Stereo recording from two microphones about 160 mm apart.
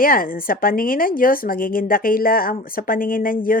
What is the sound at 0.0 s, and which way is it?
A child's voice, 65° left (ahead or behind).